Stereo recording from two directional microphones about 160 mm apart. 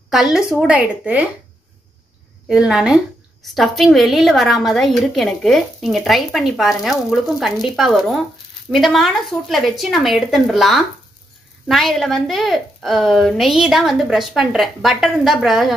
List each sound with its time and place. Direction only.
0.1 s a woman's voice: centre (ahead or behind)
2.4 s a woman's voice: 5° right (ahead or behind)